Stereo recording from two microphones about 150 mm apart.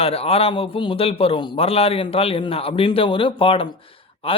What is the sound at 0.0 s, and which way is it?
A man's voice, 40° left (ahead or behind).